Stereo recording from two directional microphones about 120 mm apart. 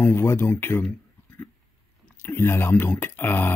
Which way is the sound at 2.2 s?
20° left (ahead or behind).